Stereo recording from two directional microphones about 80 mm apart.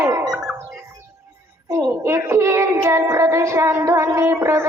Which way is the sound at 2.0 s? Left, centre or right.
Right.